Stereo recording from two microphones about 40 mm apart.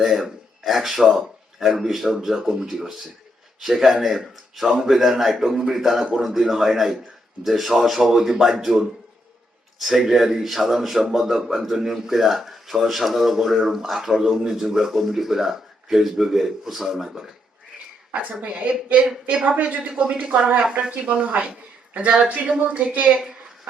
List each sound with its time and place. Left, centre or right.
0.0 s a man's voice: centre
18.1 s speech: right
20.2 s speech: right
20.9 s speech: right
22.6 s speech: right